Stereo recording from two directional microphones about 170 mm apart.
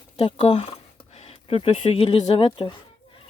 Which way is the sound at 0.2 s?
35° left (ahead or behind).